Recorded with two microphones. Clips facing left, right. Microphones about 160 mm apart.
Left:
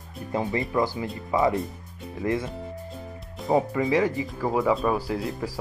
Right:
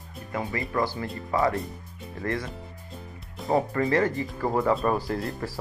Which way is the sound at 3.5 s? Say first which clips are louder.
Left 1 dB; 10° left (ahead or behind).